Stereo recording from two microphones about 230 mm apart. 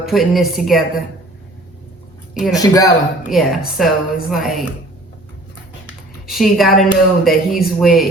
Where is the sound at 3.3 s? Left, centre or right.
Centre.